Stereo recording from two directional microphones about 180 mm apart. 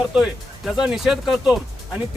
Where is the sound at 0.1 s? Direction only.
5° right (ahead or behind).